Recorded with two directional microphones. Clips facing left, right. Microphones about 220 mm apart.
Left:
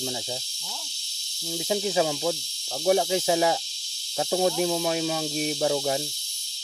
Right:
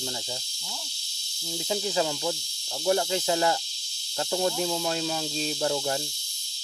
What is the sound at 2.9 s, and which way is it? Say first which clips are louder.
Speech: left 3 dB; 15° left (ahead or behind).